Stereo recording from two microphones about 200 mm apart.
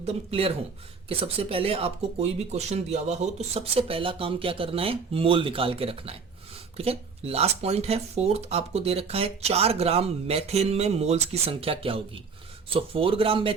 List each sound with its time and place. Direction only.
0.0 s speech: 30° right (ahead or behind)